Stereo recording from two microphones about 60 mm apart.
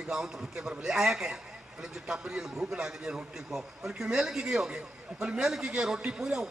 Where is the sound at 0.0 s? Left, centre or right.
Centre.